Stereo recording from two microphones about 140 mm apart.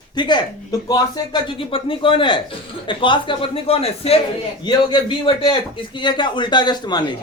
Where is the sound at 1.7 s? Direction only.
40° left (ahead or behind).